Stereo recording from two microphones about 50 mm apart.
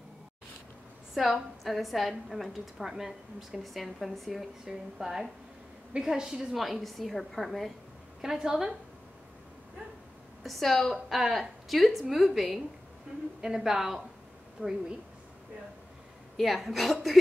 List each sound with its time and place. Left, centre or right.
1.1 s a woman's voice: centre
6.5 s a woman's voice: centre
8.2 s a woman's voice: centre
10.4 s a woman's voice: centre
14.6 s speech: right
16.3 s a woman's voice: centre